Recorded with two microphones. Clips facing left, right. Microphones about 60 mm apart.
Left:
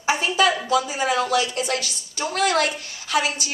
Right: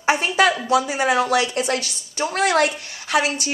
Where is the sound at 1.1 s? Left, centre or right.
Right.